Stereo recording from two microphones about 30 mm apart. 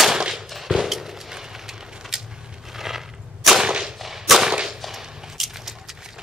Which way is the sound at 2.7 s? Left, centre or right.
Centre.